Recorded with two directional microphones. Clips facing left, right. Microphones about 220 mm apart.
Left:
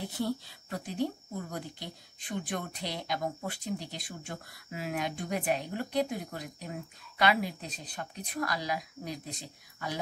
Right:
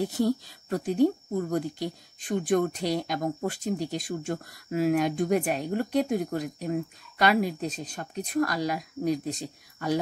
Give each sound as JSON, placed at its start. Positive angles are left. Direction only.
{"t": 0.0, "sound": "speech", "side_deg": -40}